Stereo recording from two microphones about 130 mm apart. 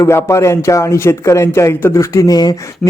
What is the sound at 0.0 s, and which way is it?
A man's voice, 20° left (ahead or behind).